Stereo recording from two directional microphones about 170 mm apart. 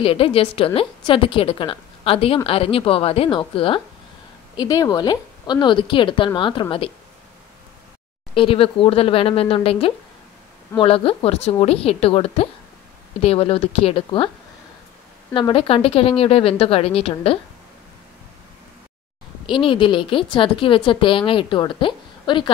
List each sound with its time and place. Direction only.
0.0 s a woman's voice: 35° left (ahead or behind)
8.4 s a woman's voice: 30° left (ahead or behind)
15.3 s a woman's voice: 30° left (ahead or behind)
19.4 s a woman's voice: 30° left (ahead or behind)